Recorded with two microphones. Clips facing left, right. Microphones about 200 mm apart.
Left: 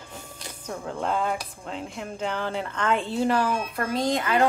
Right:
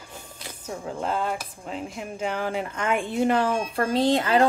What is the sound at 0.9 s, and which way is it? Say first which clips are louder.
Speech: left 1 dB; centre (ahead or behind).